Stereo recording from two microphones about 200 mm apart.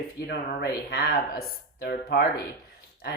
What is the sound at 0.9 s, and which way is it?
Speech, 50° left (ahead or behind).